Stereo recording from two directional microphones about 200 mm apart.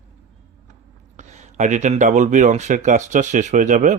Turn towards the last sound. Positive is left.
turn(degrees=-40)  # may be behind; listen again after turning